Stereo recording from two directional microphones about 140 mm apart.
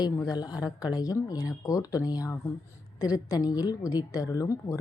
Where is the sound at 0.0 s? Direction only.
25° left (ahead or behind).